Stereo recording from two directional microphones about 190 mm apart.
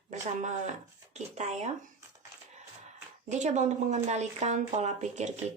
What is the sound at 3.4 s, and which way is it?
Speech, 40° right (ahead or behind).